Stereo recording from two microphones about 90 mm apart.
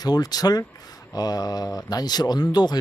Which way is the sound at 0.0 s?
45° left (ahead or behind).